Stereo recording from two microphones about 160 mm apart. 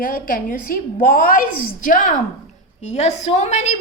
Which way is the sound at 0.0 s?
60° left (ahead or behind).